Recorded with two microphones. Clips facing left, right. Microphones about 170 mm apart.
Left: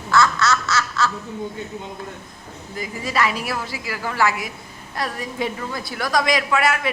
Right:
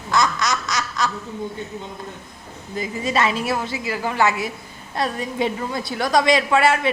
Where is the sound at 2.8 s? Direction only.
25° right (ahead or behind).